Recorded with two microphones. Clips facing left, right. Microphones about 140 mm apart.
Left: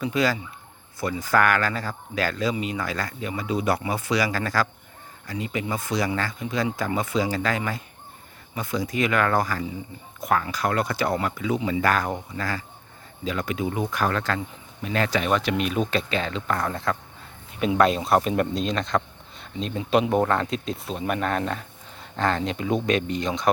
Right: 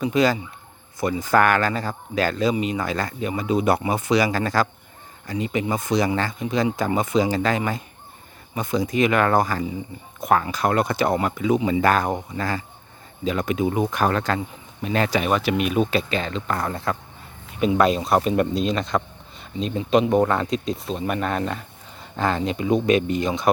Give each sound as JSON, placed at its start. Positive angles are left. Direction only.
{"t": 0.0, "sound": "speech", "side_deg": -20}